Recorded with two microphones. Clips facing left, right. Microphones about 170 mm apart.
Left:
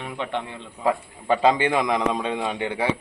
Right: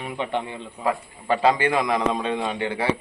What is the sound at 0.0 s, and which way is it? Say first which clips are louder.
Speech: right 2 dB; 10° right (ahead or behind).